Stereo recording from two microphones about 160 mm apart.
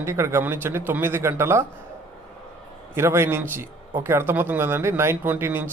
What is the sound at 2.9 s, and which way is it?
Speech, 15° right (ahead or behind).